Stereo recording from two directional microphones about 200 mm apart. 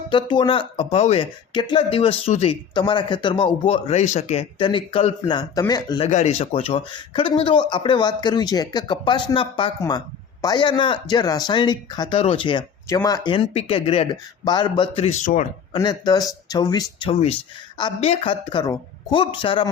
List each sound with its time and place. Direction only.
0.1 s speech: 25° left (ahead or behind)
6.1 s speech: 35° left (ahead or behind)
15.7 s speech: 20° left (ahead or behind)